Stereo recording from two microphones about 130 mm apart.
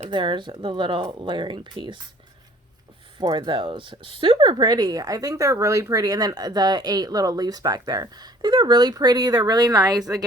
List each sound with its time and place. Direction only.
0.1 s speech: 40° right (ahead or behind)
3.2 s speech: 35° right (ahead or behind)